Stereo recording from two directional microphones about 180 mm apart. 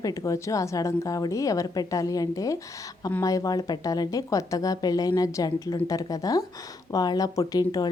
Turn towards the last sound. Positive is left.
turn(degrees=20)  # may be behind; listen again after turning